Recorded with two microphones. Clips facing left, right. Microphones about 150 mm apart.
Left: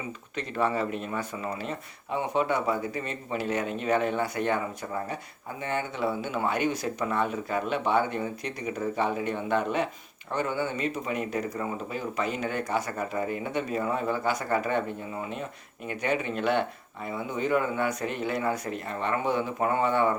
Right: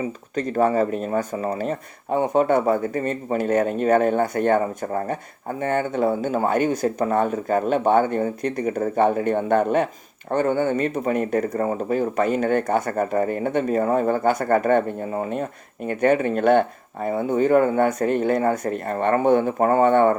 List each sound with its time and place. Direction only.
0.3 s speech: 45° right (ahead or behind)